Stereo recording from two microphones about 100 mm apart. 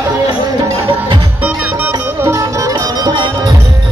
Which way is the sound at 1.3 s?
15° right (ahead or behind).